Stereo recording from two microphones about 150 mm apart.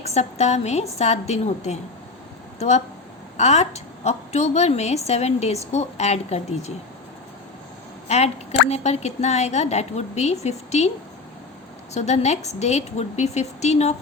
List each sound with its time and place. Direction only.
0.0 s a woman's voice: 45° left (ahead or behind)
8.0 s a woman's voice: 50° left (ahead or behind)
11.9 s a woman's voice: 50° left (ahead or behind)